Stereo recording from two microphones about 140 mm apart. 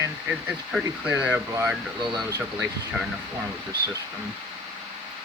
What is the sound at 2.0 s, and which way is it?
Speech, 5° right (ahead or behind).